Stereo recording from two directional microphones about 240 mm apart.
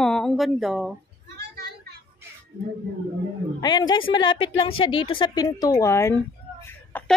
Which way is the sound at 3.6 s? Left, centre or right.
Centre.